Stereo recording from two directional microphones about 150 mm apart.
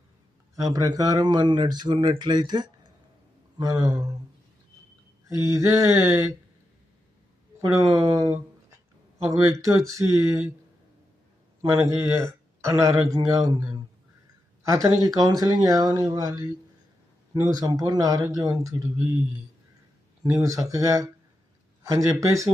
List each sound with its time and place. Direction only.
0.5 s speech: 20° right (ahead or behind)
5.4 s speech: 20° right (ahead or behind)
7.6 s speech: 20° right (ahead or behind)
11.6 s speech: 20° right (ahead or behind)
20.2 s speech: 25° right (ahead or behind)